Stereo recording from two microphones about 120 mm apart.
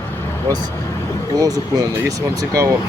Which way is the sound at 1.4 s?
30° right (ahead or behind).